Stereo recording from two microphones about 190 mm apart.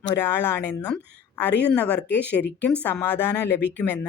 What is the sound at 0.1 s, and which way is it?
Speech, 10° left (ahead or behind).